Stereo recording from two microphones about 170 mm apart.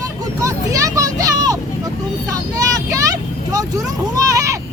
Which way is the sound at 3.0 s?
20° right (ahead or behind).